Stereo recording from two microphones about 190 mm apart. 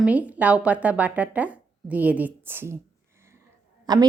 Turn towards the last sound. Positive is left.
turn(degrees=-20)  # may be behind; listen again after turning